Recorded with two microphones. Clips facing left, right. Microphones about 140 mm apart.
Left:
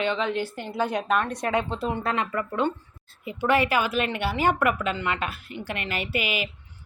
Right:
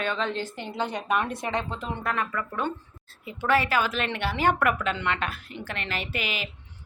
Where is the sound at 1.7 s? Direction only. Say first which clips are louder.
Left 4 dB; 35° left (ahead or behind).